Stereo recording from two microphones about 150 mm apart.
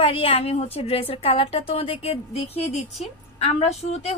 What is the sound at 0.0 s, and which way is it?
Speech, 40° left (ahead or behind).